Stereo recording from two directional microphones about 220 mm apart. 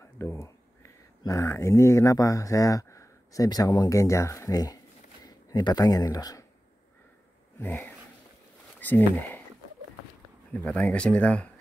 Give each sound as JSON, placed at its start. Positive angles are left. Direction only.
{"t": 0.0, "sound": "a sound", "side_deg": 10}
{"t": 1.2, "sound": "speech", "side_deg": 15}
{"t": 7.6, "sound": "speech", "side_deg": 10}
{"t": 10.6, "sound": "speech", "side_deg": 5}